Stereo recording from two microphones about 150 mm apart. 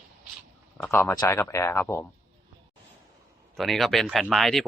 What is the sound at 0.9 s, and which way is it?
Speech, 15° left (ahead or behind).